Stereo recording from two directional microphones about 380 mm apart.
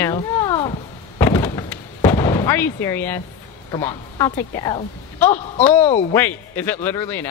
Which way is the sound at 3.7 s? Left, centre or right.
Centre.